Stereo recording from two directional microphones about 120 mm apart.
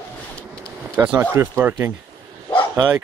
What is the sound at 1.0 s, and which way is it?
Speech, 10° right (ahead or behind).